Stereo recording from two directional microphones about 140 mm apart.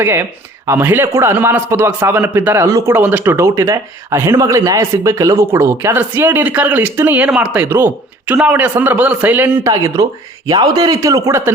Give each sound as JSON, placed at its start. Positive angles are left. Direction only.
{"t": 0.0, "sound": "a man's voice", "side_deg": -15}
{"t": 9.6, "sound": "speech", "side_deg": -25}